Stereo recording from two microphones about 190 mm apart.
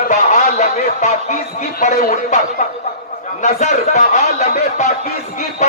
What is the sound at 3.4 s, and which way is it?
Speech, 40° left (ahead or behind).